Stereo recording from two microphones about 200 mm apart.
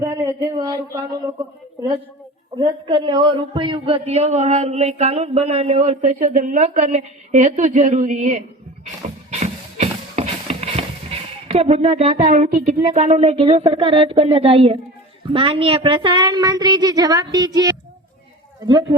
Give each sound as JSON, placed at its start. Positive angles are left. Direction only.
{"t": 0.0, "sound": "a sound", "side_deg": -15}
{"t": 2.6, "sound": "a man's voice", "side_deg": -20}
{"t": 9.0, "sound": "music", "side_deg": -35}
{"t": 12.9, "sound": "a man's voice", "side_deg": -35}